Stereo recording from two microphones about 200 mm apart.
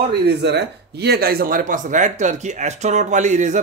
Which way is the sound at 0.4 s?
55° right (ahead or behind).